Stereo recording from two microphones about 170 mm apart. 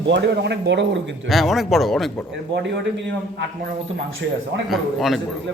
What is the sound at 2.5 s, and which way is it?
Speech, 90° right.